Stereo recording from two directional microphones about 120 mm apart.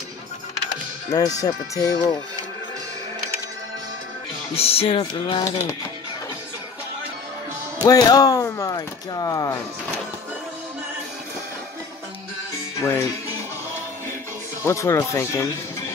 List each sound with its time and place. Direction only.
1.1 s speech: 30° left (ahead or behind)
4.6 s music: 55° left (ahead or behind)
5.4 s speech: 30° left (ahead or behind)
7.8 s speech: 30° left (ahead or behind)
12.8 s speech: 20° left (ahead or behind)
14.6 s speech: 25° left (ahead or behind)